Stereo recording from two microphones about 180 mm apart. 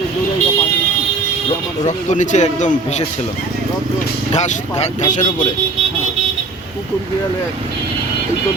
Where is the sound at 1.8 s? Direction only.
40° left (ahead or behind).